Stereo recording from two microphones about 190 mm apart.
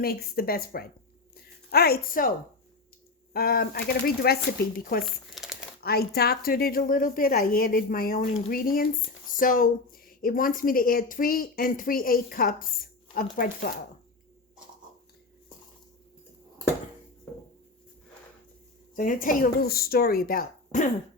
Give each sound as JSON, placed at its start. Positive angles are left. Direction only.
{"t": 0.0, "sound": "a woman's voice", "side_deg": 50}
{"t": 3.3, "sound": "a woman's voice", "side_deg": 50}
{"t": 5.3, "sound": "crumpling", "side_deg": 0}
{"t": 5.8, "sound": "a woman's voice", "side_deg": 55}
{"t": 18.9, "sound": "a woman's voice", "side_deg": 45}